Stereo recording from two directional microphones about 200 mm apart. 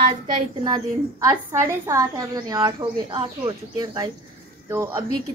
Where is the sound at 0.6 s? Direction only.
20° right (ahead or behind).